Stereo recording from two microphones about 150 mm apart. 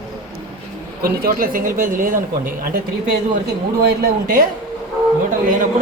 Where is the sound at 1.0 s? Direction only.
75° right (ahead or behind).